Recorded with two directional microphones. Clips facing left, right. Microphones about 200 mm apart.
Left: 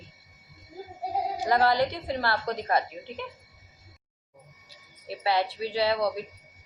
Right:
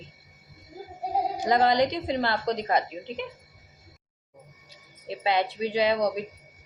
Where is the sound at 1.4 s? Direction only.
20° right (ahead or behind).